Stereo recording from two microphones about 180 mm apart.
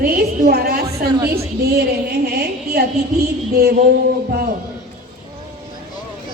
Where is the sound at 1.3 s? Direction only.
60° right (ahead or behind).